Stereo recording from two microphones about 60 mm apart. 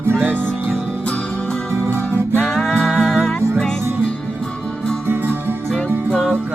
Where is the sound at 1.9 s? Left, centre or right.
Left.